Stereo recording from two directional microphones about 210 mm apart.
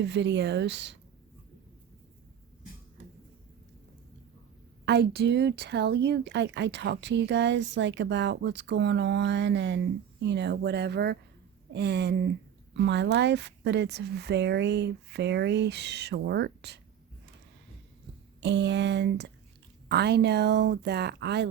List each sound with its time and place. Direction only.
0.0 s speech: 55° right (ahead or behind)
4.9 s speech: 55° right (ahead or behind)
18.3 s speech: 55° right (ahead or behind)